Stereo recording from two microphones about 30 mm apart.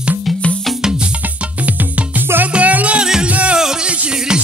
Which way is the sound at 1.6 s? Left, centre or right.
Right.